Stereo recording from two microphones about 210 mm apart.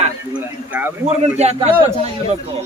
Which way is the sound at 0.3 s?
10° right (ahead or behind).